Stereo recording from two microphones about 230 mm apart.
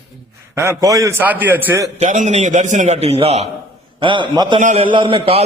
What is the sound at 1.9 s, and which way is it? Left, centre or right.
A man's voice, right.